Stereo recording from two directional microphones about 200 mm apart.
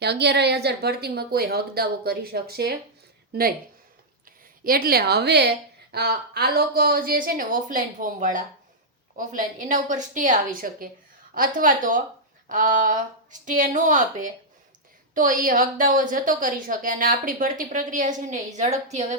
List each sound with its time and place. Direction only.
0.0 s a woman's voice: 55° right (ahead or behind)
4.6 s a woman's voice: 45° right (ahead or behind)